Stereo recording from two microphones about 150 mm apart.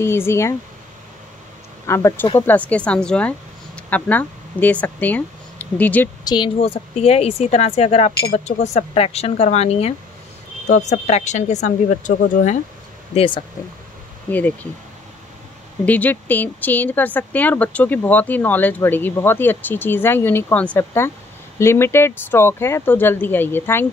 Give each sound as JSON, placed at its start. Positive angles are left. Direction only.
{"t": 0.0, "sound": "speech", "side_deg": 15}
{"t": 1.9, "sound": "speech", "side_deg": 20}
{"t": 6.2, "sound": "speech", "side_deg": 30}
{"t": 6.6, "sound": "speech", "side_deg": 45}
{"t": 13.1, "sound": "speech", "side_deg": 35}
{"t": 15.8, "sound": "speech", "side_deg": 10}